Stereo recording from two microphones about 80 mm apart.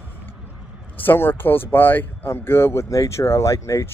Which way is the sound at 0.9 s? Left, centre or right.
Left.